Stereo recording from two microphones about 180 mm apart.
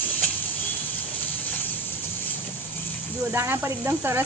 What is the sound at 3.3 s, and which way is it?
Speech, 15° right (ahead or behind).